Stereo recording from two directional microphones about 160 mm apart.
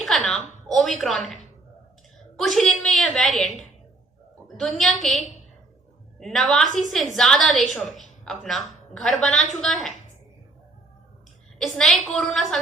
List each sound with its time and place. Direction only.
0.0 s a woman's voice: centre (ahead or behind)
11.6 s a woman's voice: centre (ahead or behind)